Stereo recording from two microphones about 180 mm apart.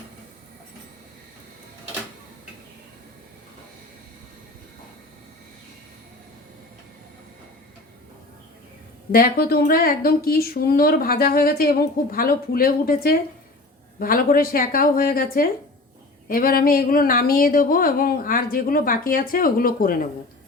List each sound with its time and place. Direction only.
9.1 s a woman's voice: 55° left (ahead or behind)